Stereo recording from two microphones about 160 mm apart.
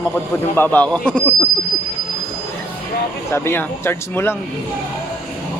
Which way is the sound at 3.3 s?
15° left (ahead or behind).